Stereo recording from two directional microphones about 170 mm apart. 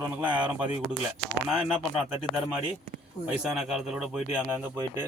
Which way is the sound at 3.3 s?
5° right (ahead or behind).